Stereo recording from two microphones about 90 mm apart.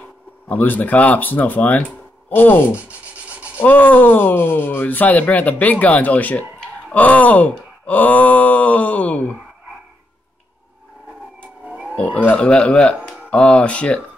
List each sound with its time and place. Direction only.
0.5 s speech: 20° left (ahead or behind)
2.7 s rub: 15° right (ahead or behind)
3.6 s speech: 20° left (ahead or behind)
11.6 s vehicle: 15° right (ahead or behind)
11.9 s speech: 15° left (ahead or behind)